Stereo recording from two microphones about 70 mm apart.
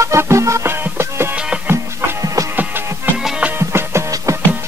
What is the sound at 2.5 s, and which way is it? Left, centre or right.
Music, right.